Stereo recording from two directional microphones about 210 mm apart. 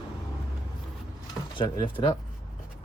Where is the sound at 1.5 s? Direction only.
25° left (ahead or behind).